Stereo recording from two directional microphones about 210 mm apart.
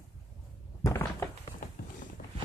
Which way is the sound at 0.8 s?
15° left (ahead or behind).